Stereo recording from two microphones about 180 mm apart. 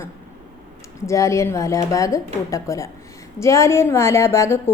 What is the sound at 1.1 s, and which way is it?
A woman's voice, 15° left (ahead or behind).